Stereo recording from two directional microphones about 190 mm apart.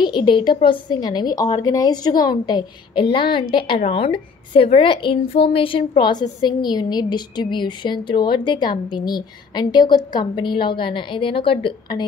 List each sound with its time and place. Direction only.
0.0 s a woman's voice: 25° left (ahead or behind)